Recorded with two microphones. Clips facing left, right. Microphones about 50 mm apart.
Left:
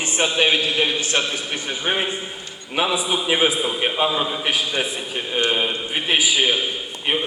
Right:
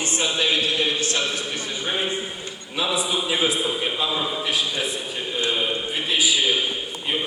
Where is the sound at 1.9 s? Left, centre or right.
Left.